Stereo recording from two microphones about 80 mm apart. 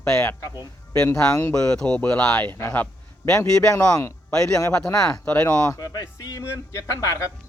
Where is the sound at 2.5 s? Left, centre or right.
Left.